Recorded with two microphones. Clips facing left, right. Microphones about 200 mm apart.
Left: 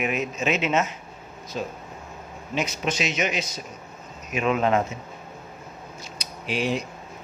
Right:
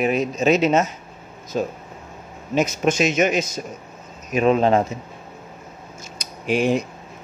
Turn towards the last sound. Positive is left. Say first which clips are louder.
# right 6 dB
turn(degrees=-50)  # may be behind; listen again after turning